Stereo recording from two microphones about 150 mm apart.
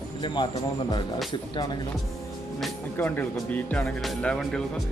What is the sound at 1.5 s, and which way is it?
Speech, 30° left (ahead or behind).